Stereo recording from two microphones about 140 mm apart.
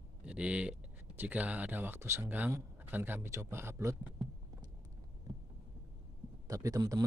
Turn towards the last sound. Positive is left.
turn(degrees=-25)  # may be behind; listen again after turning